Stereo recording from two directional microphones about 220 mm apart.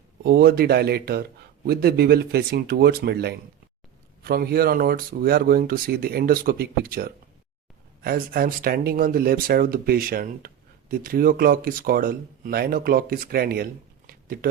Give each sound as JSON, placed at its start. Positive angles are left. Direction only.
{"t": 0.2, "sound": "speech", "side_deg": -45}